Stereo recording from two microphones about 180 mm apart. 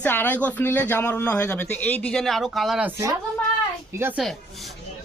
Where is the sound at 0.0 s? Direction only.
10° left (ahead or behind).